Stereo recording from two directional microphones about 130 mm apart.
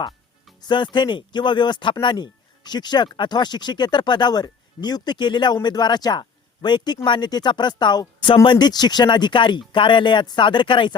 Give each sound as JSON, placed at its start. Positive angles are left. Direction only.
{"t": 0.6, "sound": "speech", "side_deg": 35}